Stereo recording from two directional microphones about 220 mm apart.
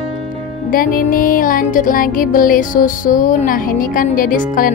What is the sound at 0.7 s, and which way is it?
Speech, 40° left (ahead or behind).